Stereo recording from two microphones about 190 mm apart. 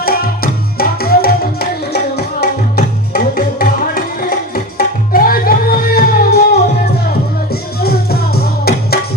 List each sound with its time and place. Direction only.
0.0 s music: 50° left (ahead or behind)
7.5 s music: 55° left (ahead or behind)